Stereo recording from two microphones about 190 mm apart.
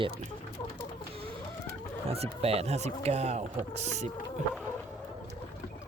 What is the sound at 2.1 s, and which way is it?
Speech, 30° right (ahead or behind).